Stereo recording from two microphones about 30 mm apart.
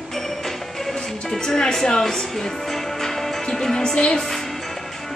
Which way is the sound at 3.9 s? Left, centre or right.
Left.